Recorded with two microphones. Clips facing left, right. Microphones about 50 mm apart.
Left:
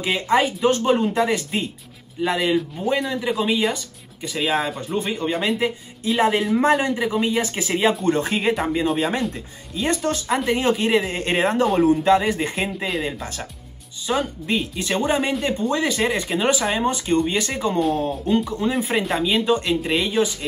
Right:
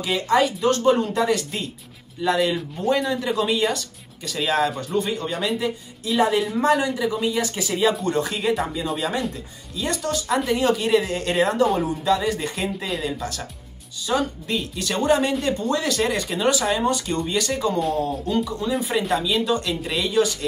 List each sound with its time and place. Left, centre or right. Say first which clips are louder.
0.0 s speech: even; left
4.9 s speech: left 1 dB; left